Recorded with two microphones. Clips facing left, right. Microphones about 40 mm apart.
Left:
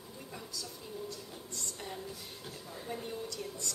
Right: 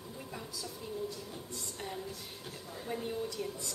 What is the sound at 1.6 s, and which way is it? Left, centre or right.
A woman's voice, centre.